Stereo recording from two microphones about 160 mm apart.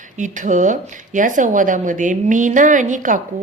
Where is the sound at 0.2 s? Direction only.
50° right (ahead or behind).